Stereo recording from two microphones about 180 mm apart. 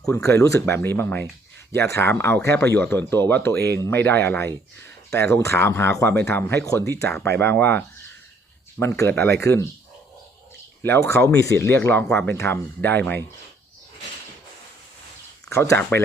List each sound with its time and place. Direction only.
0.0 s speech: 15° left (ahead or behind)
10.8 s speech: 10° left (ahead or behind)
15.4 s speech: 15° left (ahead or behind)